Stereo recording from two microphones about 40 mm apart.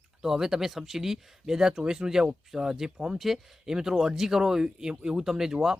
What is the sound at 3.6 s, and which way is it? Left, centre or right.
Speech, centre.